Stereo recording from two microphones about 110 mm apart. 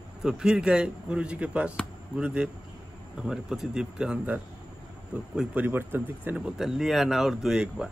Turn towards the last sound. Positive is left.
turn(degrees=-5)  # may be behind; listen again after turning